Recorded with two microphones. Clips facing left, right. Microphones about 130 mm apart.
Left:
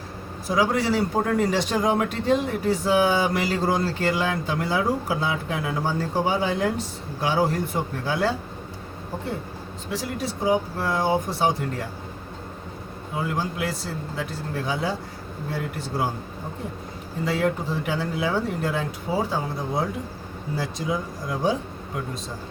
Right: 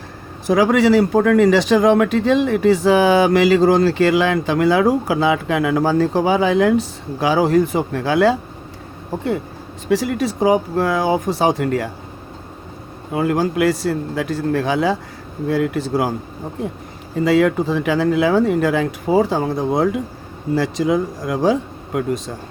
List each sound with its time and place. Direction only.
0.4 s a man's voice: 90° right
9.9 s a man's voice: 90° right
13.1 s a man's voice: 80° right
17.2 s a man's voice: 90° right